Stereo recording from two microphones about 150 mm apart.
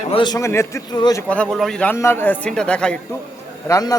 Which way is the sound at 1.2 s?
10° left (ahead or behind).